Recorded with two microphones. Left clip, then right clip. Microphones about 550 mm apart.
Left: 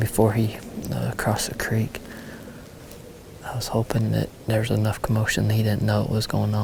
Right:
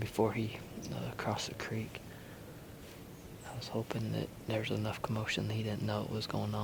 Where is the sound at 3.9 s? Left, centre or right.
Left.